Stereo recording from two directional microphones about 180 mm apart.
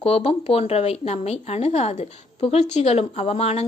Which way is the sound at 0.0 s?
35° left (ahead or behind).